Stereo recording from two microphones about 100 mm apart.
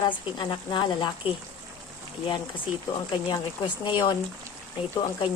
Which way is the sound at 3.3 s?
50° left (ahead or behind).